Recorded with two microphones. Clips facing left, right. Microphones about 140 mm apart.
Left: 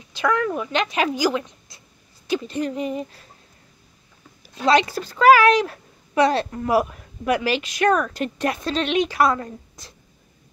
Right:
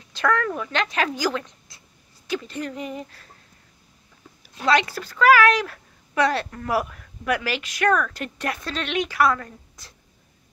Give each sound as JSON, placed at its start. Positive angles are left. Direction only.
{"t": 0.1, "sound": "speech", "side_deg": 10}
{"t": 4.6, "sound": "speech", "side_deg": 20}